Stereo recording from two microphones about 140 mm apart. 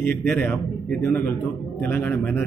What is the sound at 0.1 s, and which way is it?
A man's voice, 15° left (ahead or behind).